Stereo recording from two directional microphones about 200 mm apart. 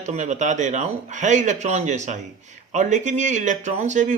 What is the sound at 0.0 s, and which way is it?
Speech, 35° right (ahead or behind).